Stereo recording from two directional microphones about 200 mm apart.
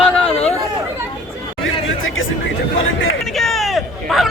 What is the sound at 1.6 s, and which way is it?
Chatter, 75° left (ahead or behind).